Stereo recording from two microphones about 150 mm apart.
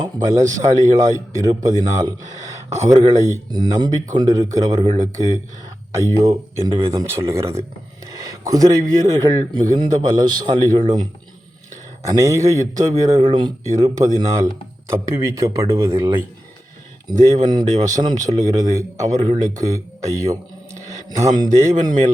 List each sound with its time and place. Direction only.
0.3 s speech: 20° right (ahead or behind)
12.0 s speech: 20° right (ahead or behind)
17.2 s speech: 30° right (ahead or behind)
21.5 s speech: 50° right (ahead or behind)